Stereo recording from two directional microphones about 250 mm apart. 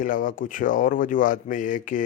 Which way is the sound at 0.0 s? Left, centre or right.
Left.